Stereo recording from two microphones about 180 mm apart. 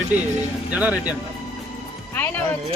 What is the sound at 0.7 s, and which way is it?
Speech, 5° right (ahead or behind).